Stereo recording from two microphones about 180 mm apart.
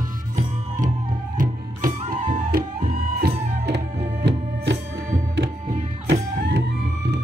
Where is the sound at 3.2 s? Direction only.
65° right (ahead or behind).